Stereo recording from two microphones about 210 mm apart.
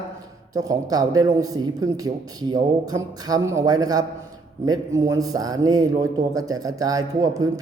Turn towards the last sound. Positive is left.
turn(degrees=-15)  # may be behind; listen again after turning